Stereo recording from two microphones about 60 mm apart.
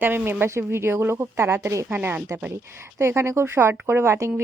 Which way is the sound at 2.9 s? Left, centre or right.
Right.